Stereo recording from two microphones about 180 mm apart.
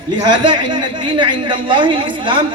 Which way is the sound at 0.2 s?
25° right (ahead or behind).